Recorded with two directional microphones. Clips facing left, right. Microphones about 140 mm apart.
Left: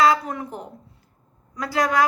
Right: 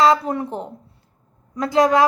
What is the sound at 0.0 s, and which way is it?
A woman's voice, 30° right (ahead or behind).